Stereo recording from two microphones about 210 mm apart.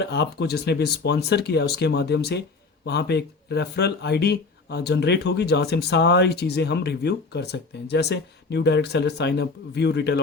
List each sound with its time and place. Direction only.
0.0 s speech: 55° left (ahead or behind)